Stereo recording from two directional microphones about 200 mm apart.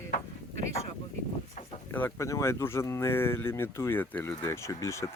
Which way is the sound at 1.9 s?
10° left (ahead or behind).